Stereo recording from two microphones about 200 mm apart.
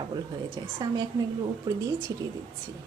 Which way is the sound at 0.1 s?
20° right (ahead or behind).